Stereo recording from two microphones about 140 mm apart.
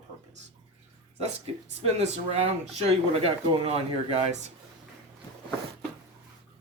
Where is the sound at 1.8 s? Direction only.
50° right (ahead or behind).